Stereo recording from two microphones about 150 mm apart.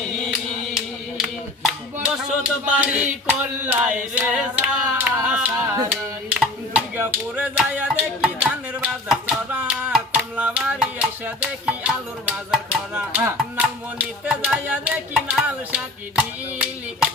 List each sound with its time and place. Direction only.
1.2 s a sound: 5° right (ahead or behind)
2.6 s music: 10° right (ahead or behind)
5.6 s music: 25° right (ahead or behind)
6.4 s music: 10° right (ahead or behind)